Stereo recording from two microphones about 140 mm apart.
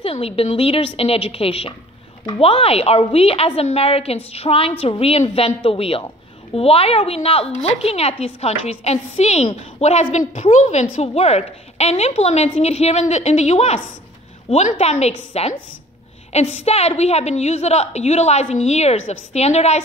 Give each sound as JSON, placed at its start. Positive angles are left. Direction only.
{"t": 0.0, "sound": "a woman's voice", "side_deg": 45}